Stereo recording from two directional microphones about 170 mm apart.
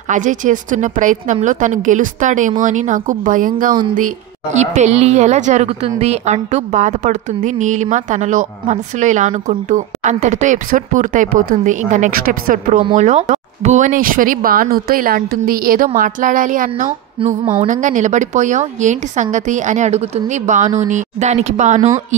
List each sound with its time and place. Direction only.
0.1 s a woman's voice: 50° right (ahead or behind)
4.6 s a woman's voice: 40° right (ahead or behind)
12.9 s a woman's voice: 40° right (ahead or behind)